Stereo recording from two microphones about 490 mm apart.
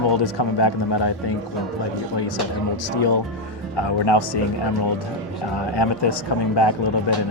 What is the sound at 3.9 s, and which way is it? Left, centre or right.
Speech, left.